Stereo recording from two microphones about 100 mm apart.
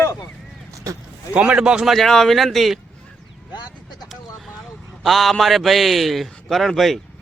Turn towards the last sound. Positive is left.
turn(degrees=0)  # may be behind; listen again after turning